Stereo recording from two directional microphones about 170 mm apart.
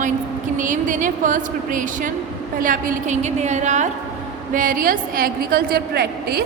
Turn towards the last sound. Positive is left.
turn(degrees=-65)  # may be behind; listen again after turning